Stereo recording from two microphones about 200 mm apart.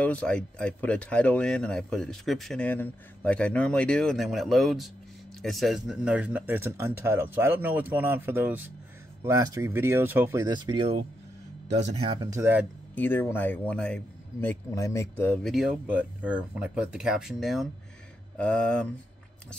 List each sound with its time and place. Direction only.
0.0 s speech: 5° left (ahead or behind); by 12.2 s 35° right (ahead or behind)
12.2 s speech: 15° right (ahead or behind)
12.9 s speech: 10° left (ahead or behind)
15.4 s speech: centre (ahead or behind)